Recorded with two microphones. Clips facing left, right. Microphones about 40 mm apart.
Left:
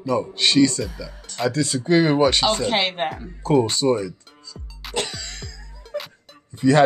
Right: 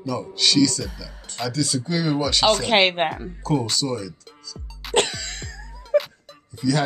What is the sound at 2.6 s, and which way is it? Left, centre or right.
Speech, right.